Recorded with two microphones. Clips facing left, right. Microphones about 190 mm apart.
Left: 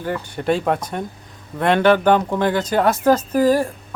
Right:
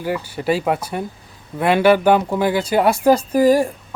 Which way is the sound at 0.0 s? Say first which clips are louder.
Right 1 dB; 5° right (ahead or behind).